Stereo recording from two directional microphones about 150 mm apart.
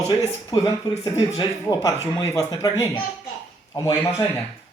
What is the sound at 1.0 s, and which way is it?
Speech, 25° left (ahead or behind).